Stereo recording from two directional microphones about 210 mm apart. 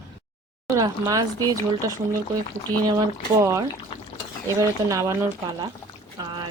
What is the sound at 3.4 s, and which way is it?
A woman's voice, 15° right (ahead or behind).